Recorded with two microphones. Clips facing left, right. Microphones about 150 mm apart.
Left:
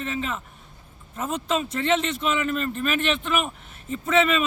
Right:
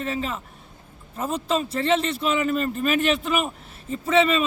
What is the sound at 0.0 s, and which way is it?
Speech, 35° right (ahead or behind).